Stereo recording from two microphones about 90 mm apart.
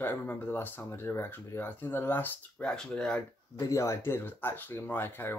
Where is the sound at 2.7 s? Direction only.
10° left (ahead or behind).